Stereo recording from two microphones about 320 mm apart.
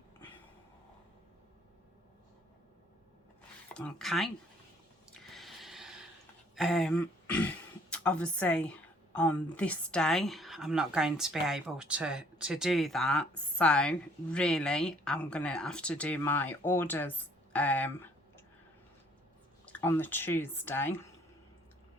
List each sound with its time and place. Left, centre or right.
3.8 s speech: centre
5.3 s a sound: centre
6.6 s speech: centre
19.6 s speech: centre